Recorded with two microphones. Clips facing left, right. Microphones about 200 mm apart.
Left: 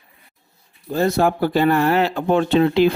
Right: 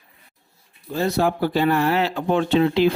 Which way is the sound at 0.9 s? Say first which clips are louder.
Left 3 dB; 45° left (ahead or behind).